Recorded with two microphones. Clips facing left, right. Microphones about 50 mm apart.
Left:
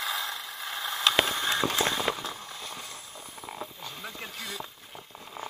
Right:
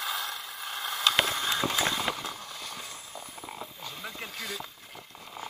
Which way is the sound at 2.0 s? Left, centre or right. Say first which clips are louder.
Left 2 dB; left.